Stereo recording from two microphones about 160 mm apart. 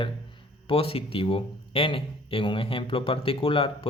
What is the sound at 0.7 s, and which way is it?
Speech, 35° left (ahead or behind).